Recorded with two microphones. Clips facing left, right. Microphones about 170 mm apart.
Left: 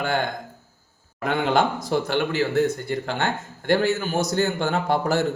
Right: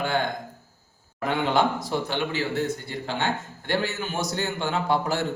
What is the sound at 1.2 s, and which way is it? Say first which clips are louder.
A man's voice: left 2 dB; 60° left (ahead or behind).